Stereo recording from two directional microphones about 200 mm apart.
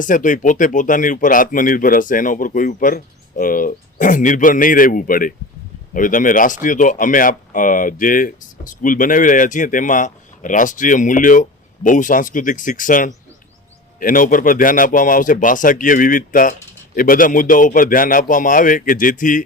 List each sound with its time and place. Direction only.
0.0 s a man's voice: 40° left (ahead or behind)